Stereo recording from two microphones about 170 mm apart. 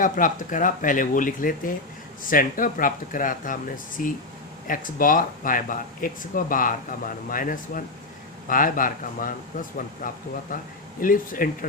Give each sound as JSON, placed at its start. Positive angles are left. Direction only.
{"t": 0.0, "sound": "speech", "side_deg": 50}